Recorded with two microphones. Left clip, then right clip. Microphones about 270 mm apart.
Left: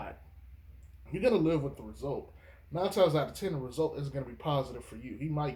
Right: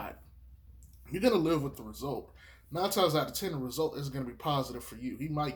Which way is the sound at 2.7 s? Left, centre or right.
Right.